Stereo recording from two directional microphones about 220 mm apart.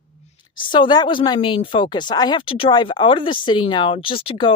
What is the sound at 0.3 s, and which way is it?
A woman's voice, 20° left (ahead or behind).